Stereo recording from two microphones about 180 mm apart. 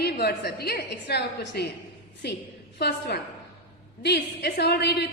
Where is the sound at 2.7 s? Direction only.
65° left (ahead or behind).